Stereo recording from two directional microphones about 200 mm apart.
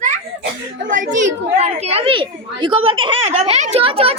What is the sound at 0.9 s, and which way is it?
A woman's voice, 40° right (ahead or behind).